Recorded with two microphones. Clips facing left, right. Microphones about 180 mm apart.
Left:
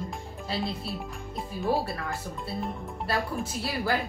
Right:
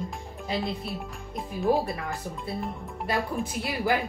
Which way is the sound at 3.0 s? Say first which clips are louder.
Right 2 dB; 15° right (ahead or behind).